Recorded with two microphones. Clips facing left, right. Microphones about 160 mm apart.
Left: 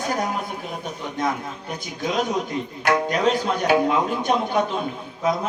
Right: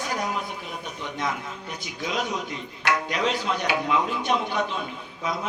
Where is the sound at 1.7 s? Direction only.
50° left (ahead or behind).